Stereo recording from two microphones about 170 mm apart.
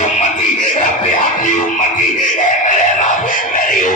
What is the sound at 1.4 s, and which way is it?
Music, 50° left (ahead or behind).